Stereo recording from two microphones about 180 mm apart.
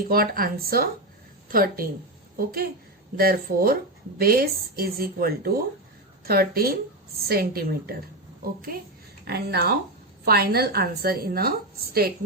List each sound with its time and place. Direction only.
0.1 s a woman's voice: 55° right (ahead or behind)